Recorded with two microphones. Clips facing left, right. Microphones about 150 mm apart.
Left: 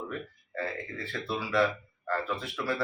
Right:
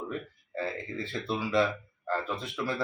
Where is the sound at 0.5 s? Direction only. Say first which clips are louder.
Right 1 dB; 20° right (ahead or behind).